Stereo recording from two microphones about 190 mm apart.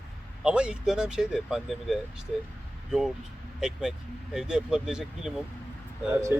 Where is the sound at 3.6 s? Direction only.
Centre (ahead or behind).